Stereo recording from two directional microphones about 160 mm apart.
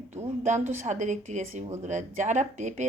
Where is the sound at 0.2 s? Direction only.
50° right (ahead or behind).